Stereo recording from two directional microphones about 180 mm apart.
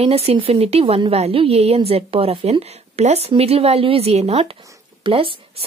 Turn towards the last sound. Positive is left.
turn(degrees=-30)  # may be behind; listen again after turning